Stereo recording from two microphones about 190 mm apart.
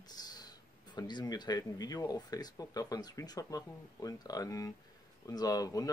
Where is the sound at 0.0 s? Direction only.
20° left (ahead or behind).